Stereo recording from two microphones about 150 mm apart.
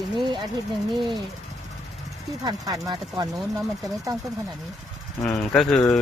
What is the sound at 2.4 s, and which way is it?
Speech, 25° right (ahead or behind).